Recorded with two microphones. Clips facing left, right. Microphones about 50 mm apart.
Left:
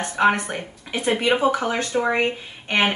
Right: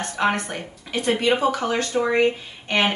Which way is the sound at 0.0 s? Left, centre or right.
Centre.